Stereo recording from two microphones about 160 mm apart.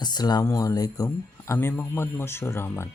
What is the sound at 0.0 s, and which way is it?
Speech, 25° left (ahead or behind).